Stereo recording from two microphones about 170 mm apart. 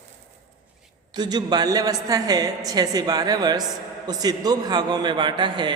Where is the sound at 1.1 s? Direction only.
25° right (ahead or behind).